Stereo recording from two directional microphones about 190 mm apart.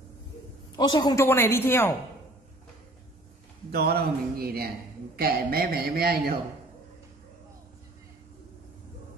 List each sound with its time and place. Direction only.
0.7 s a woman's voice: 25° left (ahead or behind)
3.7 s a man's voice: 55° right (ahead or behind)